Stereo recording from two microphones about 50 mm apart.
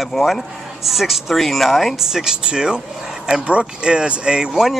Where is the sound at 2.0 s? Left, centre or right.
Centre.